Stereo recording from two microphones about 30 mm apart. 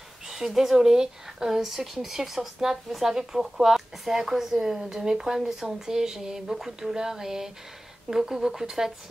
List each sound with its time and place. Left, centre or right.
0.6 s speech: centre